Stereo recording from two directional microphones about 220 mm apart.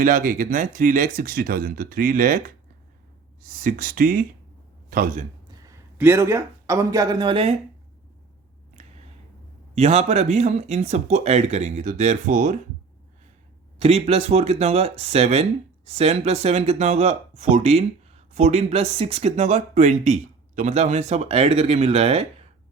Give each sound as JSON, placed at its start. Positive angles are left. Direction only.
{"t": 0.0, "sound": "speech", "side_deg": -40}
{"t": 5.5, "sound": "speech", "side_deg": -15}
{"t": 9.7, "sound": "speech", "side_deg": -30}
{"t": 13.7, "sound": "speech", "side_deg": -30}